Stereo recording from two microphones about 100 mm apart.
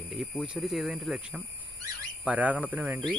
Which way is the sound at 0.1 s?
10° right (ahead or behind).